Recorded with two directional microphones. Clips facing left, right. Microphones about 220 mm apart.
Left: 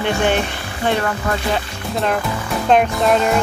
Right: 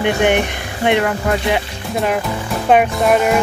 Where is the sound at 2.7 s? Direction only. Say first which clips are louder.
Right 2 dB; 10° right (ahead or behind).